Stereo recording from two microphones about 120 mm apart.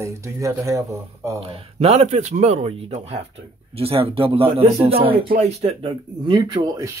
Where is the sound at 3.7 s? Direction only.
55° right (ahead or behind).